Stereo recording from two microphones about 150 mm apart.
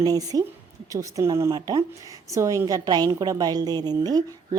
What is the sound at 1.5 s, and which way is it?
Speech, 35° right (ahead or behind).